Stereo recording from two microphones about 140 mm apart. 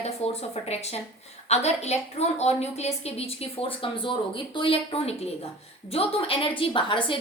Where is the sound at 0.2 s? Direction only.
50° left (ahead or behind).